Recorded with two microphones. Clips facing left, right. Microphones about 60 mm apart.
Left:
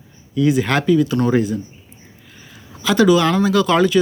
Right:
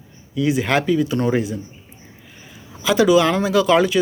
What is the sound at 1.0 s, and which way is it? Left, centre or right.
Speech, right.